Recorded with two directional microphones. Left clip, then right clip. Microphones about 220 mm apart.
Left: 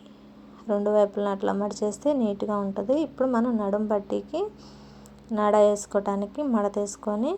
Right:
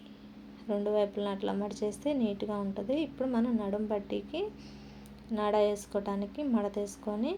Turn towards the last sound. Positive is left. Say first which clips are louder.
# left 7 dB
turn(degrees=20)  # may be behind; listen again after turning